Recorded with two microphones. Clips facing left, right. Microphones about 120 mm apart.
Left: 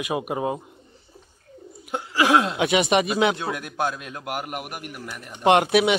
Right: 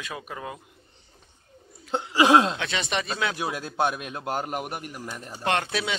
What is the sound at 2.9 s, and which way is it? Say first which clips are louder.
Speech: left 8 dB; 15° left (ahead or behind).